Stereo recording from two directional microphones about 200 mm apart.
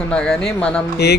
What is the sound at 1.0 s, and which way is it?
Speech, 55° left (ahead or behind).